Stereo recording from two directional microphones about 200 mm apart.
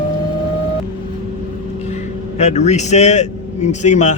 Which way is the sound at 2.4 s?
35° left (ahead or behind).